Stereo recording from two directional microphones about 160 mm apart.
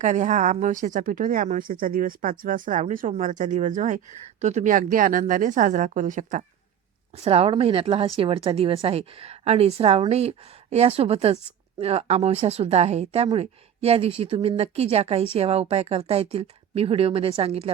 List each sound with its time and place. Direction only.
0.0 s speech: 50° right (ahead or behind)
7.2 s a woman's voice: 40° right (ahead or behind)